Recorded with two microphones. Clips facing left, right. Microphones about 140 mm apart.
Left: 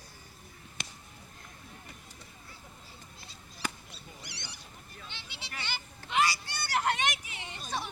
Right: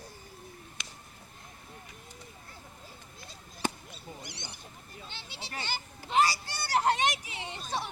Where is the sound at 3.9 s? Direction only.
50° right (ahead or behind); by 7.9 s 25° right (ahead or behind).